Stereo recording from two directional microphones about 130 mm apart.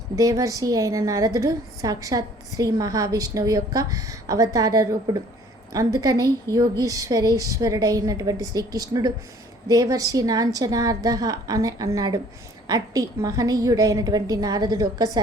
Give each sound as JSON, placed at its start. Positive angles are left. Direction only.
{"t": 0.2, "sound": "a woman's voice", "side_deg": -25}